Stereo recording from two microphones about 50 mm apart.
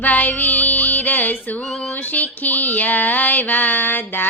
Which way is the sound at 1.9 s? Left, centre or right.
Left.